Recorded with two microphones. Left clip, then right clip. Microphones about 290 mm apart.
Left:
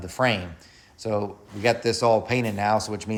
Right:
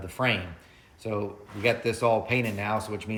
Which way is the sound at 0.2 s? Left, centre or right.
Centre.